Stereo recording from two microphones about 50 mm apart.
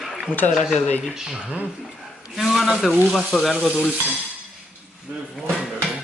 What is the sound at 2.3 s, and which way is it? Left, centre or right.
Speech, centre.